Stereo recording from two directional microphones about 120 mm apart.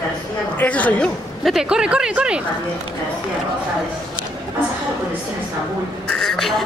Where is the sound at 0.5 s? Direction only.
10° left (ahead or behind).